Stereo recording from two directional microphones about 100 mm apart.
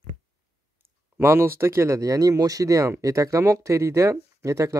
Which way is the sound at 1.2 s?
25° right (ahead or behind).